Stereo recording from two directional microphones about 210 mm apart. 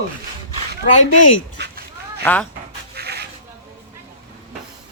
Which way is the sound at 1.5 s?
50° right (ahead or behind).